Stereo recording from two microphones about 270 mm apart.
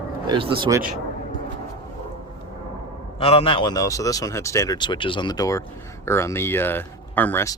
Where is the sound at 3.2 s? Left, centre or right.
Left.